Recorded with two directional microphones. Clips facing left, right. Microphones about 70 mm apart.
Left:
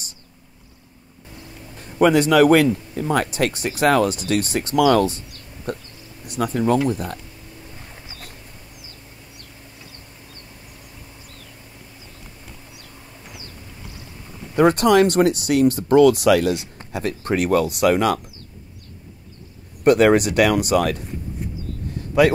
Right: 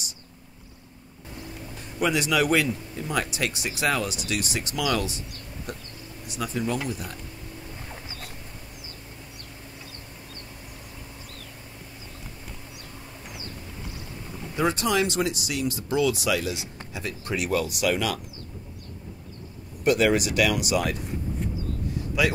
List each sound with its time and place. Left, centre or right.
1.8 s speech: left
14.5 s speech: left
19.8 s speech: left
22.2 s speech: left